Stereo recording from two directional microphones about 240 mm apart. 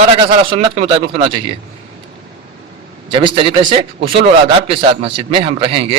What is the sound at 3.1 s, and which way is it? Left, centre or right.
A man's voice, right.